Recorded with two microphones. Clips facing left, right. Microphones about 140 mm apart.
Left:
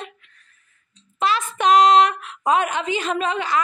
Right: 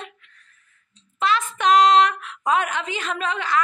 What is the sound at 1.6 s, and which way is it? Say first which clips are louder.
Speech: left 1 dB; 10° left (ahead or behind).